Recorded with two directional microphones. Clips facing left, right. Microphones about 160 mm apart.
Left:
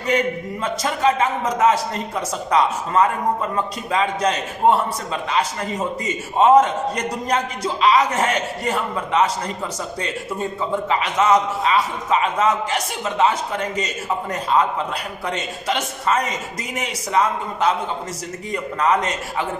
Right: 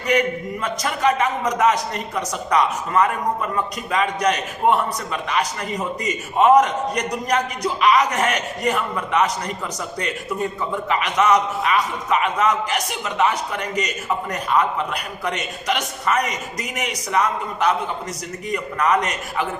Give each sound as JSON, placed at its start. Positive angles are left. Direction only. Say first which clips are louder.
{"t": 0.6, "sound": "a man's voice", "louder": "left 2 dB", "side_deg": 25}
{"t": 10.9, "sound": "a man's voice", "louder": "even", "side_deg": 25}